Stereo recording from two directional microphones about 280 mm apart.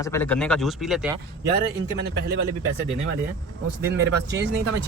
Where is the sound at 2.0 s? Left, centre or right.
Right.